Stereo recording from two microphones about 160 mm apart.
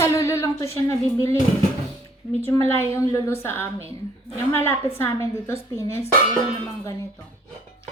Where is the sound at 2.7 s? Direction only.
15° left (ahead or behind).